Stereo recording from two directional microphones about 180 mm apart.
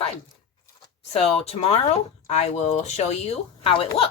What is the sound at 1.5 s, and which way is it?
Speech, 35° left (ahead or behind).